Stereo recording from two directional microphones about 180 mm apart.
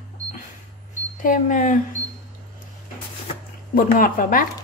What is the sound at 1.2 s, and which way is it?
Speech, 50° left (ahead or behind).